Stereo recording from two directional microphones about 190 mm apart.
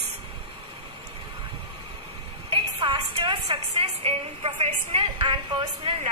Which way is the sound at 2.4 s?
30° right (ahead or behind).